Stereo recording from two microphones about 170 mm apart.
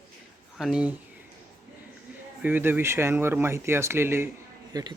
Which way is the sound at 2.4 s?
10° right (ahead or behind).